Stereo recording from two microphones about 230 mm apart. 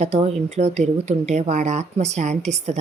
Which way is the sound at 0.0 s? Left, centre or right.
Right.